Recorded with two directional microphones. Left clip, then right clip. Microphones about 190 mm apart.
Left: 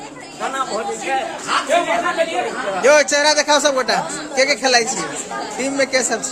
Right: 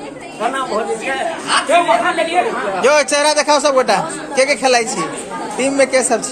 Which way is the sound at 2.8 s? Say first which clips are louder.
Even; 5° left (ahead or behind).